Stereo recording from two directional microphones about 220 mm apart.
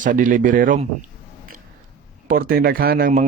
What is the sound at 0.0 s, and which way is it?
Speech, 35° right (ahead or behind).